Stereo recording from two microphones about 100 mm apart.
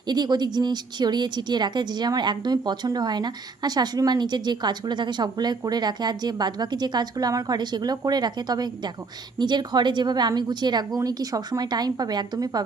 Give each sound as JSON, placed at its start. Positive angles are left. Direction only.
{"t": 0.1, "sound": "a woman's voice", "side_deg": -45}